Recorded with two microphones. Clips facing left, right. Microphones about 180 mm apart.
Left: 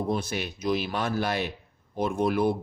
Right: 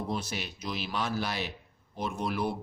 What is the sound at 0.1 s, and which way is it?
Speech, 55° left (ahead or behind).